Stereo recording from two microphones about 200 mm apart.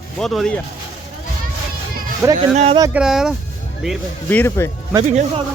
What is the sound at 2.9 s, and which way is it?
Speech, 5° right (ahead or behind).